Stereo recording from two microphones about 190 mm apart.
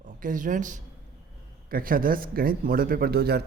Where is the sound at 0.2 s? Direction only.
45° right (ahead or behind).